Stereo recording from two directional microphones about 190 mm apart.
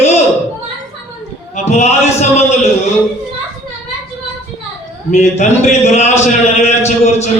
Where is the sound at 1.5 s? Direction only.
35° left (ahead or behind).